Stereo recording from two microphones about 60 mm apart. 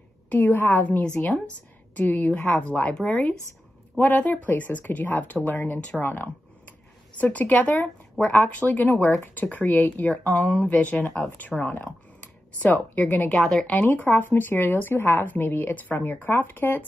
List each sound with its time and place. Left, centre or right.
0.3 s speech: left
1.0 s speech: left
2.9 s speech: centre
4.0 s speech: left
13.4 s speech: centre
13.8 s speech: left